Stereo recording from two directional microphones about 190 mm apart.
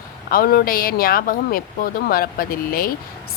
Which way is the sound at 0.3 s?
50° left (ahead or behind).